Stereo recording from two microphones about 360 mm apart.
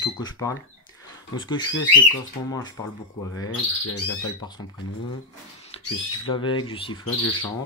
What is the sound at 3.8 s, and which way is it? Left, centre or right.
Speech, left.